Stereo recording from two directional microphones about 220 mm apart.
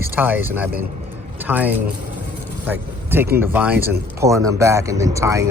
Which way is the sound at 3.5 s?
10° right (ahead or behind).